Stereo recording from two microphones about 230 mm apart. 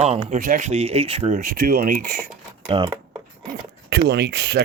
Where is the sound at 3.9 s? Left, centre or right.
Right.